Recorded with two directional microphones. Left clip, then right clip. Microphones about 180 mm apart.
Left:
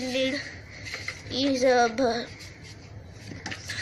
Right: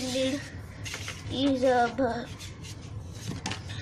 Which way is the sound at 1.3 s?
15° left (ahead or behind).